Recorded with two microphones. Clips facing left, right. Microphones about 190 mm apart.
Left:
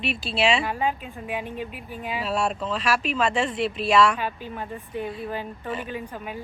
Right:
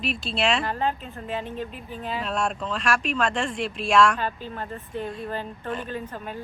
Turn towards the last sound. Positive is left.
turn(degrees=10)  # may be behind; listen again after turning